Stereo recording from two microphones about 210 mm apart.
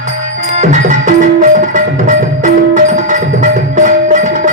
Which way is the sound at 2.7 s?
40° right (ahead or behind).